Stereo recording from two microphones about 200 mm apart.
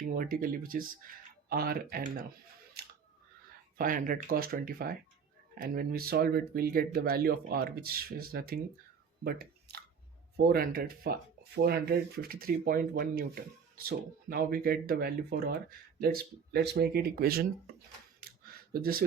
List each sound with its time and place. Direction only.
0.2 s speech: 45° right (ahead or behind)
3.8 s speech: 45° right (ahead or behind)
18.2 s a sound: 50° right (ahead or behind)